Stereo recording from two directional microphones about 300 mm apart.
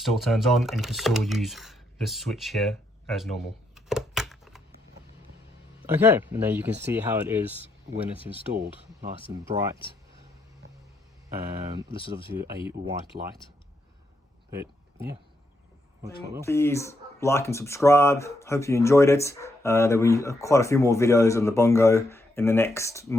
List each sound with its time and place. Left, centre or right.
0.0 s speech: centre
5.8 s speech: centre
8.5 s speech: right
11.9 s speech: centre
12.4 s speech: centre
14.5 s a sound: centre
16.5 s speech: centre